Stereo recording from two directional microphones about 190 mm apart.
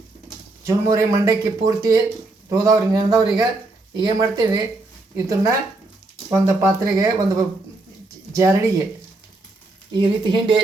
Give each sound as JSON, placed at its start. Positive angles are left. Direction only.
{"t": 0.6, "sound": "a man's voice", "side_deg": -15}
{"t": 9.9, "sound": "a man's voice", "side_deg": -25}